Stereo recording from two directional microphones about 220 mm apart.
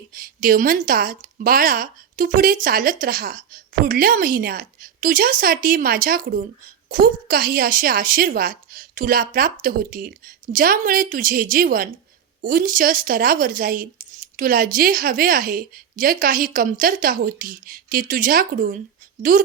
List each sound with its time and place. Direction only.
0.1 s speech: 40° right (ahead or behind)